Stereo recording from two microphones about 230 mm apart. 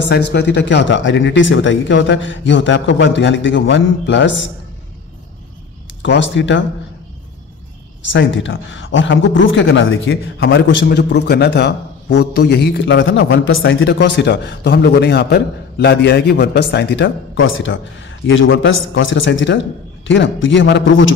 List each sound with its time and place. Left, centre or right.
0.0 s a man's voice: left
6.0 s a man's voice: left
8.1 s a man's voice: left